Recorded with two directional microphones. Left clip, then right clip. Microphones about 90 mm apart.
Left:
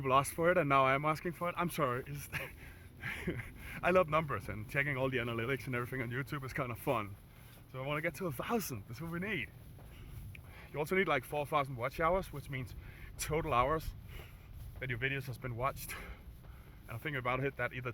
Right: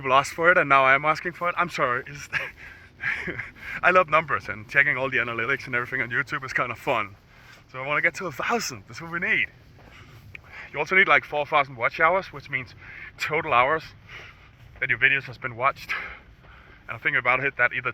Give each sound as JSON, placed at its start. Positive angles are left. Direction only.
{"t": 0.0, "sound": "speech", "side_deg": 15}
{"t": 3.7, "sound": "speech", "side_deg": 15}
{"t": 4.9, "sound": "speech", "side_deg": 30}
{"t": 5.7, "sound": "speech", "side_deg": 10}
{"t": 10.3, "sound": "speech", "side_deg": 25}